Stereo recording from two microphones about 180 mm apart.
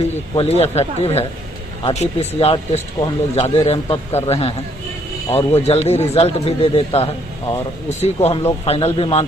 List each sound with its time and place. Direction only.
0.3 s speech: 35° left (ahead or behind)